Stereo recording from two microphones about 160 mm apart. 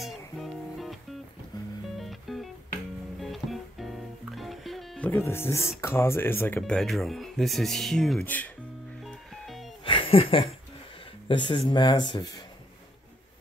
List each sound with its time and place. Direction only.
0.0 s music: centre (ahead or behind); by 5.7 s 15° left (ahead or behind)
5.8 s speech: 15° left (ahead or behind)
6.6 s speech: centre (ahead or behind)
9.0 s music: centre (ahead or behind)
9.8 s a sound: 35° left (ahead or behind)
11.2 s speech: 30° left (ahead or behind)